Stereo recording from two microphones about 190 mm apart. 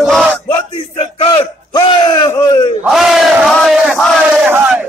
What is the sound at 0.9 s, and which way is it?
Battle cry, 25° left (ahead or behind).